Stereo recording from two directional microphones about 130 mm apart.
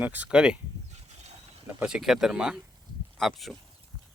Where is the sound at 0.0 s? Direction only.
10° right (ahead or behind).